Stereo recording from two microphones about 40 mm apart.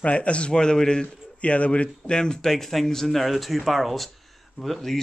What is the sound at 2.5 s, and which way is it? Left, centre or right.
Speech, centre.